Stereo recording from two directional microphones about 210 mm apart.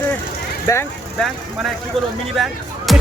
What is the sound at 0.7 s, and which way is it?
Speech, 15° left (ahead or behind).